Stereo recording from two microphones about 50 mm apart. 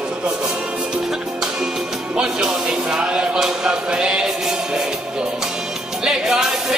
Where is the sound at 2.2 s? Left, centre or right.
Centre.